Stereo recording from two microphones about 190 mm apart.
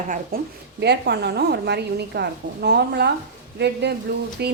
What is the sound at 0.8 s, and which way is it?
A woman's voice, 60° right (ahead or behind).